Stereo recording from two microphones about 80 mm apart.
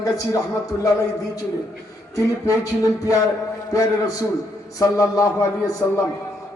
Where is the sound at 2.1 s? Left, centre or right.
Left.